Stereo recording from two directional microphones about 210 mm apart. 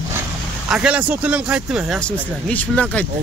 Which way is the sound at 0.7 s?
5° right (ahead or behind).